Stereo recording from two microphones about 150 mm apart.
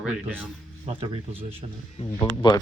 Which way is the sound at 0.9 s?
40° right (ahead or behind).